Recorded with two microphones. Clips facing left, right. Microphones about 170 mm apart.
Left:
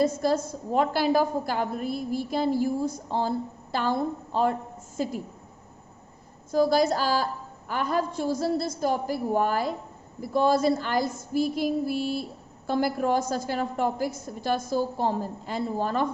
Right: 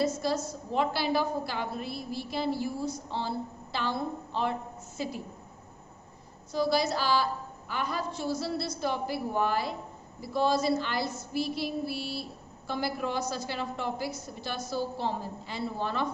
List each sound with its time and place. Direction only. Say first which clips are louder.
0.0 s a woman's voice: left 5 dB; 50° left (ahead or behind)
6.5 s a woman's voice: left 6 dB; 45° left (ahead or behind)